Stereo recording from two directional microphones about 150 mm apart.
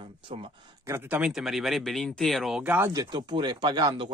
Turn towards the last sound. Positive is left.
turn(degrees=-30)  # may be behind; listen again after turning